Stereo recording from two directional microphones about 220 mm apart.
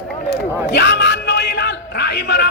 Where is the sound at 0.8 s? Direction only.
50° left (ahead or behind).